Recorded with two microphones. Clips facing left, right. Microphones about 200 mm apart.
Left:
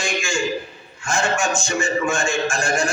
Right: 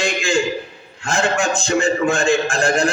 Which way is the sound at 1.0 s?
60° right (ahead or behind).